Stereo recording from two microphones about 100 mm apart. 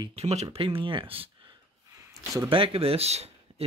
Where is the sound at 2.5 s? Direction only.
65° right (ahead or behind); by 3.6 s 90° right.